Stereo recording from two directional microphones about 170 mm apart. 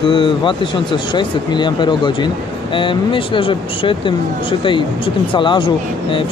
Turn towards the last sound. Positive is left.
turn(degrees=30)  # may be behind; listen again after turning